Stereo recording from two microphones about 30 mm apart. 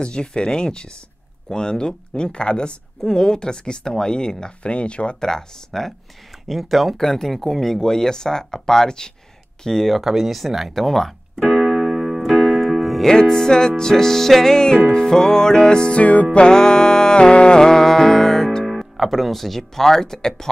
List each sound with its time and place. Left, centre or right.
0.0 s music: left
3.0 s music: centre
4.6 s speech: left
5.2 s speech: centre
7.0 s speech: centre
9.9 s speech: centre
11.7 s music: centre
13.0 s speech: left
14.5 s music: left
16.0 s music: left
16.3 s music: left
17.6 s music: centre
18.7 s speech: centre